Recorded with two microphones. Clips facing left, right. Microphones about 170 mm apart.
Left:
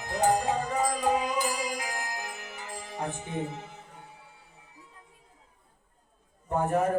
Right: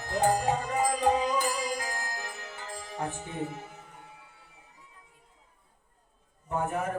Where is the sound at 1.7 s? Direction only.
15° left (ahead or behind).